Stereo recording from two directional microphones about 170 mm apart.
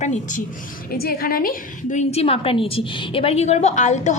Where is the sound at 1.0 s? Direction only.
60° left (ahead or behind).